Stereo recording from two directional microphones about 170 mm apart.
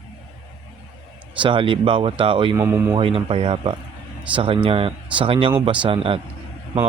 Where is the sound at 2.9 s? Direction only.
30° right (ahead or behind).